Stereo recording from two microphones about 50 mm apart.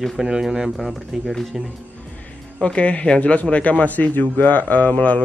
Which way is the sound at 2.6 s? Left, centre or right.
Left.